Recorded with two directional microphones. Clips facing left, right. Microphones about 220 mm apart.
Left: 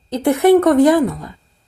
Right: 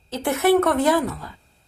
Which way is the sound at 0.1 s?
15° left (ahead or behind).